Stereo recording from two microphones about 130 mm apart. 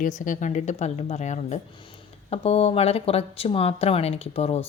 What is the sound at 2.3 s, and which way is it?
Speech, 50° left (ahead or behind).